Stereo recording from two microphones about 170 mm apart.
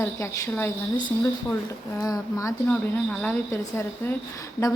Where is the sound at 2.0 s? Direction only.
20° left (ahead or behind).